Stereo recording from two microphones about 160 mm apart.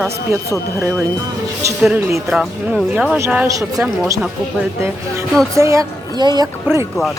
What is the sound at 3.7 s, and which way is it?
Speech, centre (ahead or behind).